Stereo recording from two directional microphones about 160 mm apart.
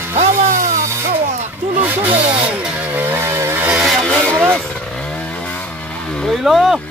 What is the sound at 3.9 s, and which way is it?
Music, centre (ahead or behind).